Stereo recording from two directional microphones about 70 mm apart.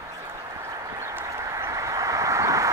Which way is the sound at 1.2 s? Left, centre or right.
Right.